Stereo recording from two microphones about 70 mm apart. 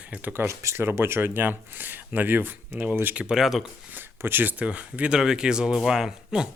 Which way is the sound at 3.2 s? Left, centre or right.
Centre.